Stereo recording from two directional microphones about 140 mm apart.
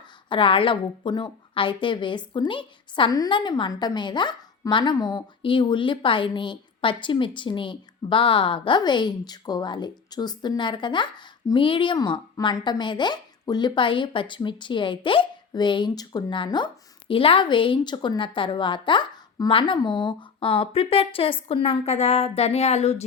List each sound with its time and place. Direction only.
0.3 s a woman's voice: 40° left (ahead or behind)